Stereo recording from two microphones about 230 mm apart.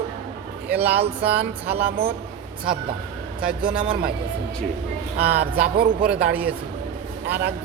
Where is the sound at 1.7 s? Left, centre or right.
Right.